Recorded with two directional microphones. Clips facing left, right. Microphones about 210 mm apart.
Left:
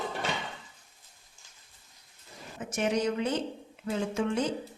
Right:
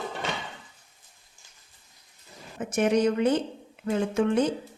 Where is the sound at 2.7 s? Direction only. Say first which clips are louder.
Right 6 dB; 55° right (ahead or behind).